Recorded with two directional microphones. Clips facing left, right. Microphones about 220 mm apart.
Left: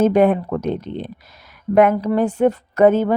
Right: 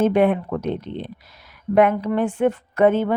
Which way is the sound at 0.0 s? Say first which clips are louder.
Left 3 dB; 40° left (ahead or behind).